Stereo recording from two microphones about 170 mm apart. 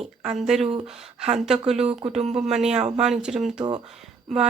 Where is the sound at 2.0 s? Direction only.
35° right (ahead or behind).